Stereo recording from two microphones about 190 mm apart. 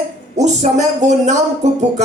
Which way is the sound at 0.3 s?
35° right (ahead or behind).